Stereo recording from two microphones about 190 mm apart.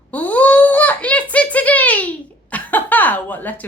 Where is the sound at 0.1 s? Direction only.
10° left (ahead or behind).